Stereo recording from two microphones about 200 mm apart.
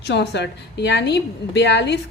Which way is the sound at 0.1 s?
60° left (ahead or behind).